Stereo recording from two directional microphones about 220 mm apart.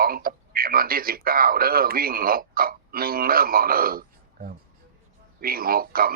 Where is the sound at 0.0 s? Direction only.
40° right (ahead or behind).